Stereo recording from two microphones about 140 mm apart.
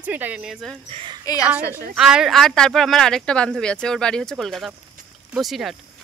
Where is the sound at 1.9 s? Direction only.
5° right (ahead or behind).